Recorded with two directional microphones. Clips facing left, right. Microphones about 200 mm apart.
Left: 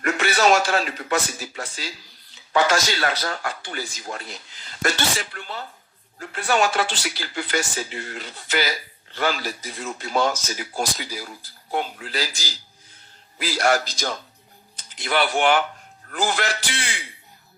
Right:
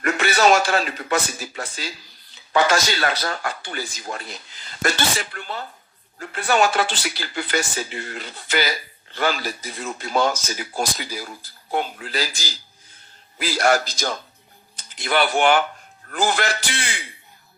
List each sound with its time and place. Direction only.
0.0 s a man's voice: 60° right (ahead or behind)